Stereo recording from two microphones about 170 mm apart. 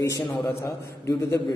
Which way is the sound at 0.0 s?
20° left (ahead or behind).